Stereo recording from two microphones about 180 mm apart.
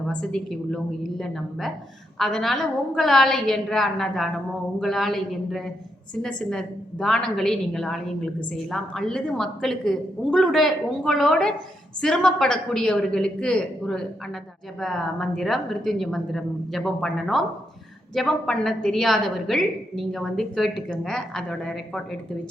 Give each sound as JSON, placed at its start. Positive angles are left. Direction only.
{"t": 0.1, "sound": "a woman's voice", "side_deg": 5}